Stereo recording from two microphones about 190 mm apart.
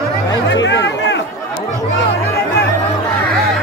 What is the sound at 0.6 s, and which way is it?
Chatter, 70° left (ahead or behind).